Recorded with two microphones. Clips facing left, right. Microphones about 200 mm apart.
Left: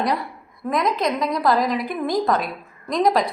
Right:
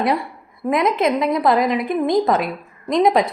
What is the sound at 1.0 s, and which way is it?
Speech, 25° right (ahead or behind).